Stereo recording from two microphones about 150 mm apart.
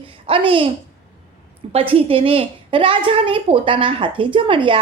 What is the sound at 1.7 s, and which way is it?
A woman's voice, 40° right (ahead or behind).